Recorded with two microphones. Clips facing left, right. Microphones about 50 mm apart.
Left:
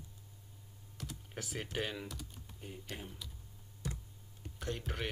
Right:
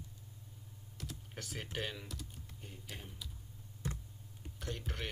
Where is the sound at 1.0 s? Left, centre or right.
Centre.